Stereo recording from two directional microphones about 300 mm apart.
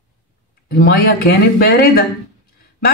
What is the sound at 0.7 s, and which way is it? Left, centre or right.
Speech, left.